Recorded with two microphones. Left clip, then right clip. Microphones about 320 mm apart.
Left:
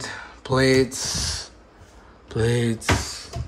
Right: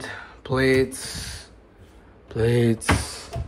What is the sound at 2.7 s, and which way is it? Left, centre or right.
Speech, centre.